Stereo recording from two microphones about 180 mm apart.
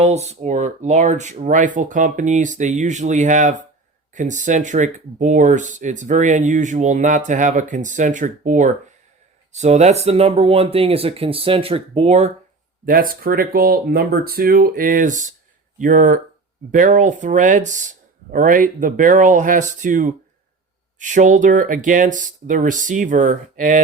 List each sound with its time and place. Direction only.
0.0 s speech: 35° right (ahead or behind)
12.8 s speech: 50° right (ahead or behind)